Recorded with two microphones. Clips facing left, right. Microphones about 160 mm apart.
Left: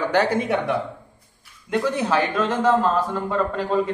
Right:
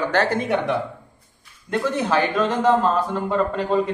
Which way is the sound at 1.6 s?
5° left (ahead or behind).